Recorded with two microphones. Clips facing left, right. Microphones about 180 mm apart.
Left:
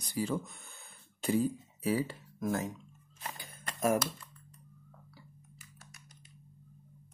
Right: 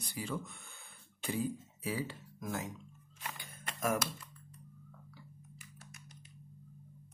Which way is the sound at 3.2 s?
35° left (ahead or behind).